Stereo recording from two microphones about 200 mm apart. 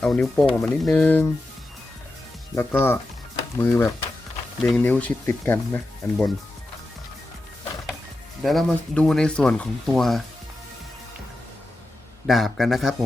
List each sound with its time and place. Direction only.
0.0 s speech: 5° left (ahead or behind)
2.6 s speech: 10° left (ahead or behind)
8.4 s speech: centre (ahead or behind)
12.3 s speech: centre (ahead or behind)